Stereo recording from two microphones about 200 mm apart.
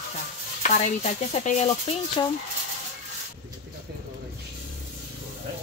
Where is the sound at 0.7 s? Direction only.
35° left (ahead or behind).